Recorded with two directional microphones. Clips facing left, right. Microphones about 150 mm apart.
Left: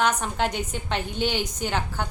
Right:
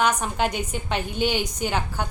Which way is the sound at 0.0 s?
10° right (ahead or behind).